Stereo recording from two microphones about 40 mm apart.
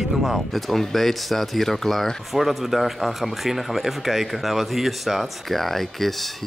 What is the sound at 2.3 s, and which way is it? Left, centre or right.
Speech, centre.